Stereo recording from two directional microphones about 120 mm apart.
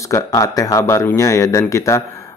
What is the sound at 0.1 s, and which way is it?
Speech, 30° left (ahead or behind).